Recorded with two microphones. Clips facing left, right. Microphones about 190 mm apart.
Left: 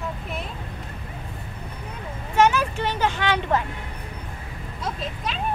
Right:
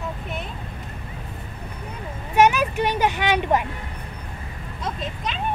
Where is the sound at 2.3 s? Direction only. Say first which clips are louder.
Right 2 dB; 15° right (ahead or behind).